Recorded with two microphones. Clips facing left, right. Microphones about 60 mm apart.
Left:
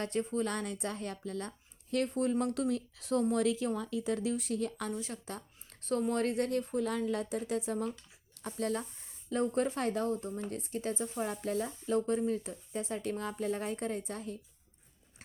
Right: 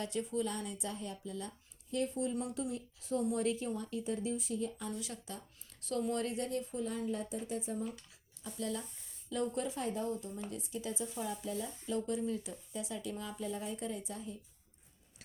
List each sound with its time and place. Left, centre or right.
0.0 s speech: left
0.4 s a woman's voice: left
3.3 s speech: left
4.9 s speech: left
6.1 s speech: left
6.8 s a woman's voice: left
8.4 s speech: left